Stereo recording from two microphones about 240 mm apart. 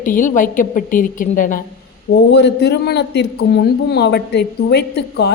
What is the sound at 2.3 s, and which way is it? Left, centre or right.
A woman's voice, left.